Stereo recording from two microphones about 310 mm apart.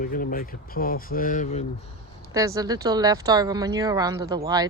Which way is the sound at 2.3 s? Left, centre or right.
Centre.